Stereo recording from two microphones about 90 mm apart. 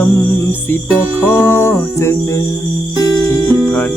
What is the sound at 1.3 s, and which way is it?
Music, 25° left (ahead or behind).